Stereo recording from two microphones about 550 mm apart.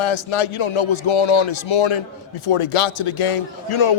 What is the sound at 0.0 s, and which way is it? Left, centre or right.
Speech, left.